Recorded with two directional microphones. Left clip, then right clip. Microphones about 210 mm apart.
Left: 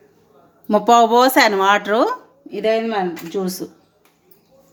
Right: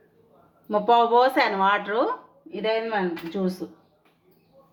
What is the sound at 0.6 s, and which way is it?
Speech, 60° left (ahead or behind).